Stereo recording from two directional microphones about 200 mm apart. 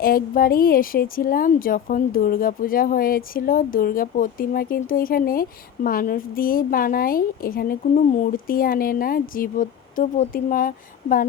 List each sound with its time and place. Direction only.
0.0 s speech: 45° left (ahead or behind)